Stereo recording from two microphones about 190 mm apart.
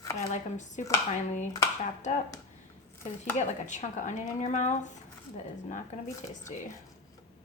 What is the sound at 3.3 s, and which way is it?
Speech, 40° left (ahead or behind).